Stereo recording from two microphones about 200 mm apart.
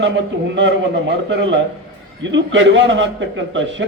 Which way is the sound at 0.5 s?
65° right (ahead or behind).